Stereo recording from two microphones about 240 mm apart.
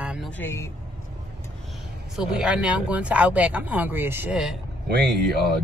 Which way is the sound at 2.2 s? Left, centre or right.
Centre.